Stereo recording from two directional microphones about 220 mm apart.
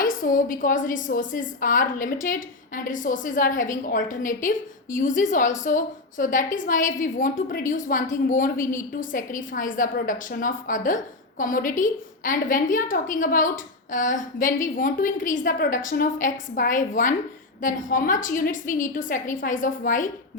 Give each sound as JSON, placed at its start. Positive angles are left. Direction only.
{"t": 0.0, "sound": "a woman's voice", "side_deg": 40}